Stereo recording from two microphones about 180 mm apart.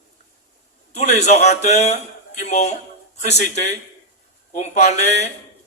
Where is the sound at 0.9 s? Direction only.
40° left (ahead or behind).